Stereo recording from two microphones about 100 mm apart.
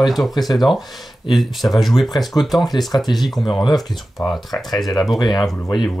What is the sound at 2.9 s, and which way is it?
Speech, 40° left (ahead or behind).